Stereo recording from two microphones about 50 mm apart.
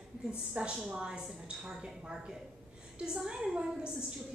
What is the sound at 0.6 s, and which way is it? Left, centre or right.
A woman's voice, right.